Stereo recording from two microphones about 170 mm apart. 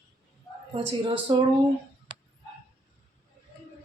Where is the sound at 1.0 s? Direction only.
30° right (ahead or behind).